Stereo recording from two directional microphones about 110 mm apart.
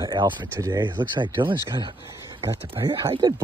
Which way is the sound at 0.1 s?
40° right (ahead or behind).